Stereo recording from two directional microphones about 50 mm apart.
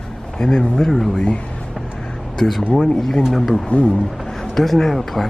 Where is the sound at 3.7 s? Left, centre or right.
Left.